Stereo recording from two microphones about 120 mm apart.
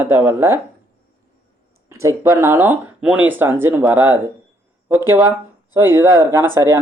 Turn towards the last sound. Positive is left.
turn(degrees=-20)  # may be behind; listen again after turning